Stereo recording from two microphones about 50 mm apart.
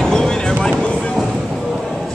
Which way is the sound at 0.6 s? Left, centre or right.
Centre.